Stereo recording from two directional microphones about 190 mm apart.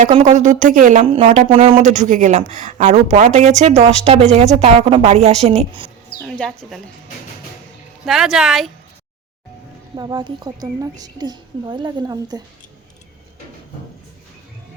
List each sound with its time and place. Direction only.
0.1 s speech: 35° right (ahead or behind)
6.2 s speech: centre (ahead or behind)
8.0 s speech: centre (ahead or behind)
9.9 s a woman's voice: 20° right (ahead or behind)